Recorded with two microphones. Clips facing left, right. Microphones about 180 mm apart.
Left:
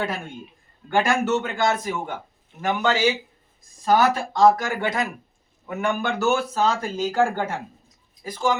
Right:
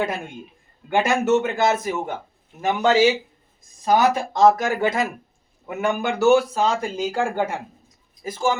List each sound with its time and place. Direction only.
0.9 s a man's voice: 20° right (ahead or behind)